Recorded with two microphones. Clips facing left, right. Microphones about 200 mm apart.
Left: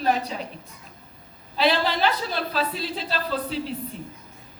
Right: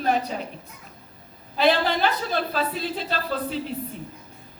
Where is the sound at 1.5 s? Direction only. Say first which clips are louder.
Right 2 dB; 50° right (ahead or behind).